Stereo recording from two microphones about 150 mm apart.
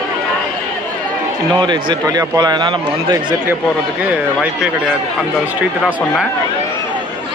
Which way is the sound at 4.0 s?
10° right (ahead or behind).